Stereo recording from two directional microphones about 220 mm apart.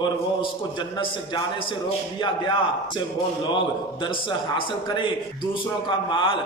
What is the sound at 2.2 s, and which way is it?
Speech, 20° left (ahead or behind).